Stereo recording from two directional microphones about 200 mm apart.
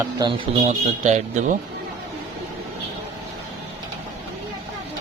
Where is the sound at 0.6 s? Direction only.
35° right (ahead or behind).